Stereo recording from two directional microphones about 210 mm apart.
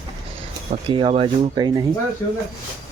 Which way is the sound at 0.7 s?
25° right (ahead or behind).